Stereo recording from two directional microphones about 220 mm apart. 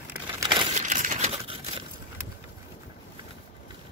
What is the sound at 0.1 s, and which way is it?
Crumpling, 15° right (ahead or behind).